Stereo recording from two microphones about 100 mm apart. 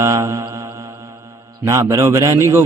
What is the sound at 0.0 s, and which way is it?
Mantra, 30° right (ahead or behind).